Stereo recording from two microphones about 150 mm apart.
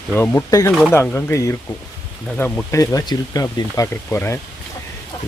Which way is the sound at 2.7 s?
25° left (ahead or behind).